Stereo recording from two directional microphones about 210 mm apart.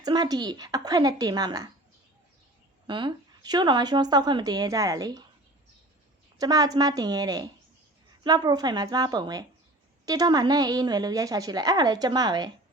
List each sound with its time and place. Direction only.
0.0 s speech: 20° right (ahead or behind)
2.8 s speech: 20° right (ahead or behind)
6.4 s a woman's voice: 20° right (ahead or behind)